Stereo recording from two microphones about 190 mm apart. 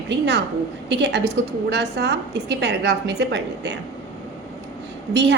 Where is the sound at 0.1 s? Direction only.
65° right (ahead or behind).